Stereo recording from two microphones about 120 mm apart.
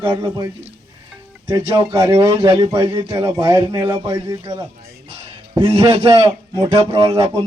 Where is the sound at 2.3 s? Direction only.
45° right (ahead or behind).